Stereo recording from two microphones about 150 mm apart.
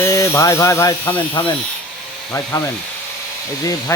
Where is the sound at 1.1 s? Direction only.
35° left (ahead or behind).